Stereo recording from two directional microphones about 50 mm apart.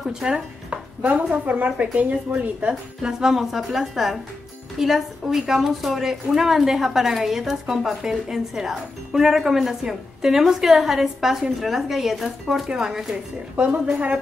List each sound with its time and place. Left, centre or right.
0.0 s speech: centre; by 2.7 s right
3.0 s a woman's voice: centre